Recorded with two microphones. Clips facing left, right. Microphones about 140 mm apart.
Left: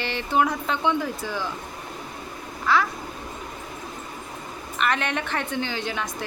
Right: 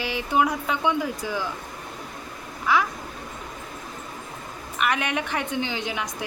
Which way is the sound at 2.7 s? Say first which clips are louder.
Even; 15° right (ahead or behind).